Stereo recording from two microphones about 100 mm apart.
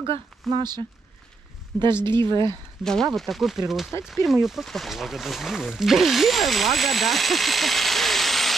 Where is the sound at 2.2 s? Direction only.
50° right (ahead or behind).